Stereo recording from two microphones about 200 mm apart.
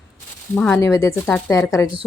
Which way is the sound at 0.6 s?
10° left (ahead or behind).